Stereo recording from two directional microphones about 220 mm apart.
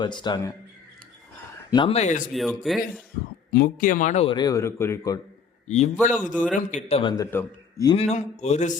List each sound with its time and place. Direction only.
0.0 s a man's voice: 20° left (ahead or behind)
1.7 s a man's voice: 25° left (ahead or behind)
2.3 s a man's voice: centre (ahead or behind)
3.5 s a man's voice: 40° left (ahead or behind); by 5.2 s 15° left (ahead or behind)
5.6 s a man's voice: 30° left (ahead or behind)
6.3 s a man's voice: 5° left (ahead or behind)
6.7 s a man's voice: 30° left (ahead or behind); by 7.9 s 15° left (ahead or behind)
7.9 s a man's voice: 30° left (ahead or behind)